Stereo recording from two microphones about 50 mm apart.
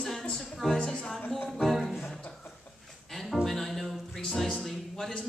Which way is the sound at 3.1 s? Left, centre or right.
Centre.